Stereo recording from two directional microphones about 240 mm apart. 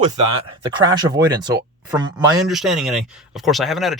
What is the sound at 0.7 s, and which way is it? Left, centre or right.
Speech, centre.